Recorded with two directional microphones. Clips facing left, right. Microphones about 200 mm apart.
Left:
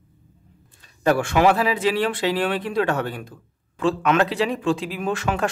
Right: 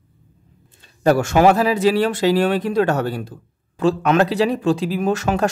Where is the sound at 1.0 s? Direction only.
40° right (ahead or behind).